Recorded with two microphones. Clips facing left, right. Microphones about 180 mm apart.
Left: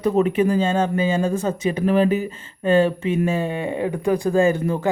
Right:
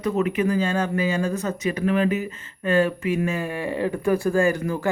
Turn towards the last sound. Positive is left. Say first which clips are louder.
# left 3 dB
turn(degrees=25)  # may be behind; listen again after turning